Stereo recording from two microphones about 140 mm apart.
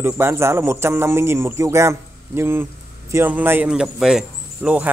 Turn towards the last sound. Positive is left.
turn(degrees=-5)  # may be behind; listen again after turning